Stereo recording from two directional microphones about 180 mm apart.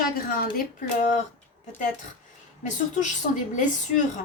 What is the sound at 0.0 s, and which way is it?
Speech, 55° left (ahead or behind).